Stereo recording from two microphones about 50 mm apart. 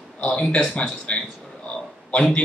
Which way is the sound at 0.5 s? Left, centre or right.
Centre.